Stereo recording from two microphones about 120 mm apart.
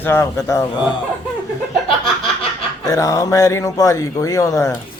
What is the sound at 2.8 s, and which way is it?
A man's voice, 30° left (ahead or behind).